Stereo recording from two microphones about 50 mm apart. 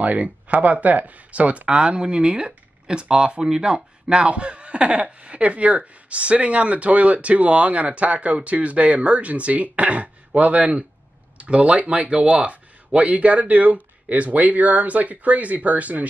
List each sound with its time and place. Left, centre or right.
0.0 s speech: right